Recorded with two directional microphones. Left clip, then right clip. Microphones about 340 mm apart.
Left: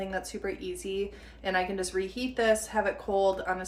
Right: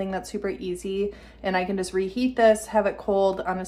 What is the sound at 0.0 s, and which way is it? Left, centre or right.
A woman's voice, centre.